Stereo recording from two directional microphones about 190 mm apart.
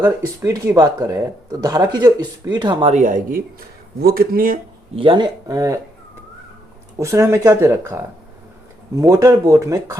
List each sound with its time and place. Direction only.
0.0 s speech: 15° right (ahead or behind)
2.9 s speech: 40° right (ahead or behind)
4.0 s speech: 50° right (ahead or behind)
4.9 s speech: 25° right (ahead or behind)
7.0 s speech: 15° right (ahead or behind)